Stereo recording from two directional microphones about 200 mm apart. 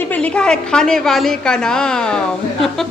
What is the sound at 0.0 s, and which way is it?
A woman's voice, 5° left (ahead or behind).